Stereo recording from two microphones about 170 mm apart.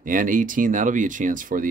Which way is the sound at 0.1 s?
50° right (ahead or behind).